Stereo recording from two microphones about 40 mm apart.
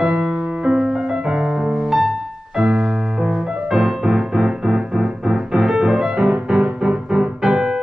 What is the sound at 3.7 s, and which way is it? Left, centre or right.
Music, centre.